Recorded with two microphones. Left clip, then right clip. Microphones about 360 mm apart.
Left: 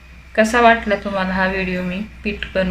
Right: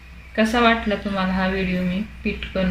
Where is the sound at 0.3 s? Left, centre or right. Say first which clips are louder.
Left 5 dB; left.